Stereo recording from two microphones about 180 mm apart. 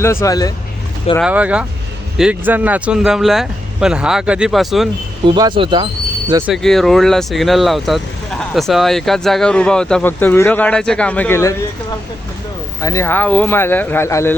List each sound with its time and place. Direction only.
0.0 s speech: 15° left (ahead or behind)
1.2 s speech: 10° right (ahead or behind)
5.2 s speech: 25° right (ahead or behind)
6.5 s speech: centre (ahead or behind)
12.8 s speech: 15° left (ahead or behind)